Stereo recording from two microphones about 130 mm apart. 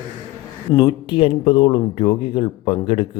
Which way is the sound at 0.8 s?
40° left (ahead or behind).